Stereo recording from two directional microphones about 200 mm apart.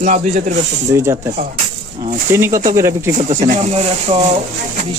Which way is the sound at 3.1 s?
40° right (ahead or behind).